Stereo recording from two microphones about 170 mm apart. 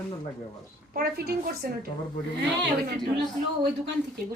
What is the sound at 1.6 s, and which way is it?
Speech, 65° right (ahead or behind).